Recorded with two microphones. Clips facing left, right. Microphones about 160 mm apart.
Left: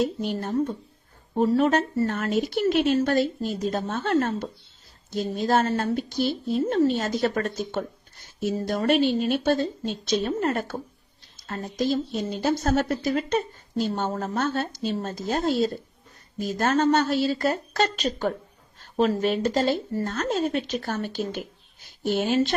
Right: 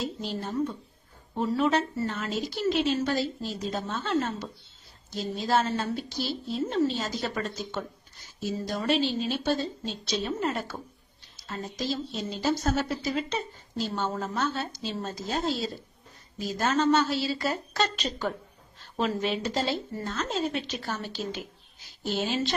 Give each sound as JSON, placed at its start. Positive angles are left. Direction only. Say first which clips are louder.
{"t": 0.0, "sound": "a woman's voice", "louder": "left 7 dB", "side_deg": 55}